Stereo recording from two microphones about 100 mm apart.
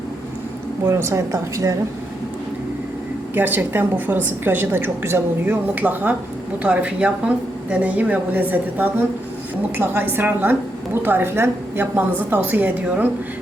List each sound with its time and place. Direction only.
0.9 s a woman's voice: 30° right (ahead or behind)
3.3 s a woman's voice: 20° right (ahead or behind)